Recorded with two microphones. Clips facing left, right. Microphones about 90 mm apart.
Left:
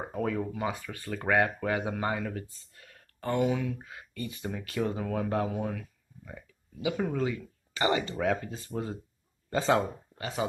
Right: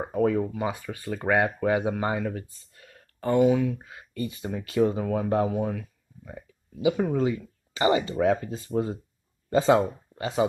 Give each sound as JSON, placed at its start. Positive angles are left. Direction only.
{"t": 0.1, "sound": "speech", "side_deg": -20}